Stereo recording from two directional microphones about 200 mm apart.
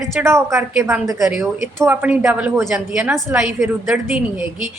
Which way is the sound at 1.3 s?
Centre (ahead or behind).